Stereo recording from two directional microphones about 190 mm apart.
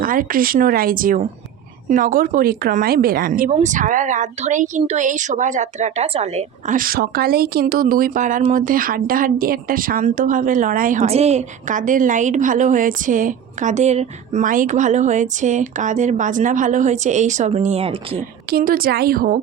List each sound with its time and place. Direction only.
0.0 s a woman's voice: 45° right (ahead or behind)
11.0 s a woman's voice: 35° right (ahead or behind)
18.5 s a woman's voice: 50° right (ahead or behind)